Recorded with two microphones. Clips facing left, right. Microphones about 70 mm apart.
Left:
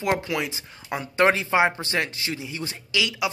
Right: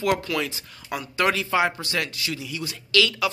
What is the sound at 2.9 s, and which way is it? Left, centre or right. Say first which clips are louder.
Speech: right 4 dB; centre.